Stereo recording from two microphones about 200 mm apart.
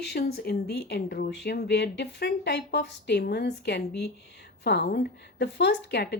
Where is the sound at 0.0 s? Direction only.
55° left (ahead or behind).